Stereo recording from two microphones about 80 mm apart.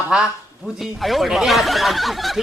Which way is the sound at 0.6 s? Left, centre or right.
Centre.